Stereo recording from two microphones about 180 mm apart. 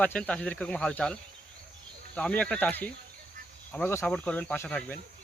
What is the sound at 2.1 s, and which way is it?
Speech, 5° left (ahead or behind).